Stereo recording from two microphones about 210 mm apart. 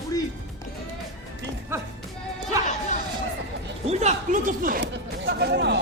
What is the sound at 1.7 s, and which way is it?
Music, 10° right (ahead or behind).